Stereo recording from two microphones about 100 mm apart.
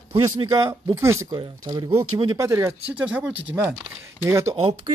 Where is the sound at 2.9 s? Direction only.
15° right (ahead or behind).